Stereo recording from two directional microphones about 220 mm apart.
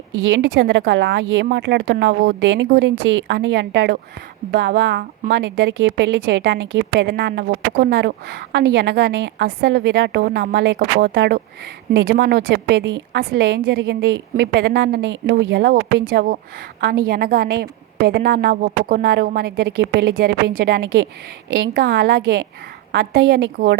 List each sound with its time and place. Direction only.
0.3 s a woman's voice: 55° right (ahead or behind)